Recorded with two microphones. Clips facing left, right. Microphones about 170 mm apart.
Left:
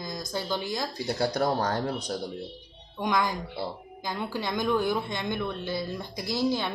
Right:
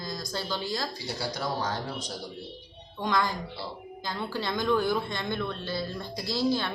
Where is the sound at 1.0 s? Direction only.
50° left (ahead or behind).